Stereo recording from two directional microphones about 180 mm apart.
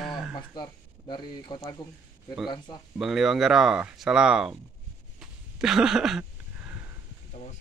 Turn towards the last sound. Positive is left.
turn(degrees=-5)  # may be behind; listen again after turning